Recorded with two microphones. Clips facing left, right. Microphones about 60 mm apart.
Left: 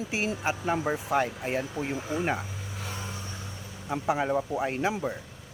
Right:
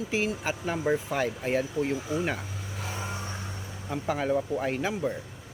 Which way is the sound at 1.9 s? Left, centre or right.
Left.